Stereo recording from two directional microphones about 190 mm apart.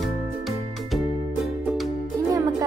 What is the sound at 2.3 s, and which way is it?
Music, 20° right (ahead or behind).